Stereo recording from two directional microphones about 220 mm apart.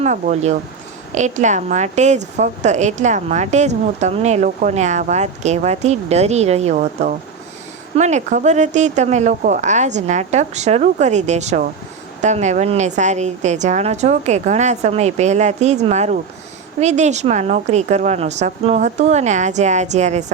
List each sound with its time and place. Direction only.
0.0 s a woman's voice: 30° right (ahead or behind)